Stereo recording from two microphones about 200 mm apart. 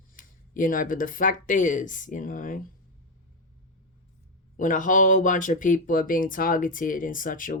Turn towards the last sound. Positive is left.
turn(degrees=40)  # may be behind; listen again after turning